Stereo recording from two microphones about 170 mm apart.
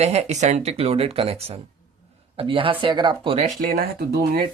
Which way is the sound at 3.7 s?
60° right (ahead or behind).